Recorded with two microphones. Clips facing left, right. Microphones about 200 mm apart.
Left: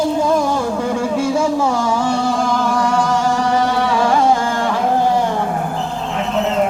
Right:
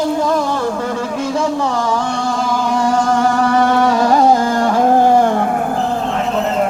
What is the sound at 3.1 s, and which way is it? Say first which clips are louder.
Music: right 2 dB; 55° right (ahead or behind).